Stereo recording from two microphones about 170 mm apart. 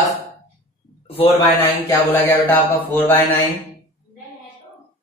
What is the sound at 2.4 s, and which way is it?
Speech, 10° left (ahead or behind).